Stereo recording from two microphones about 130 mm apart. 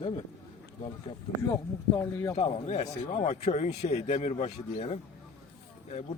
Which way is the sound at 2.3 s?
55° left (ahead or behind).